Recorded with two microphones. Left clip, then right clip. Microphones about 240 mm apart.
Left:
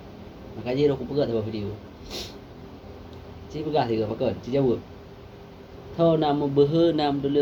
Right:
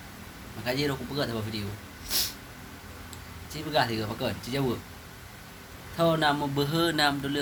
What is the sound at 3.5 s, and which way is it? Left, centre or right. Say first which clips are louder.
A man's voice: left 3 dB; centre.